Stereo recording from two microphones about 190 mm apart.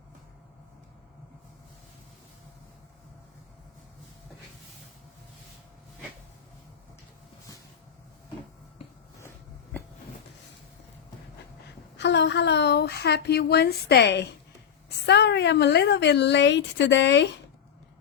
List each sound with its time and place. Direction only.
11.9 s a woman's voice: 70° left (ahead or behind)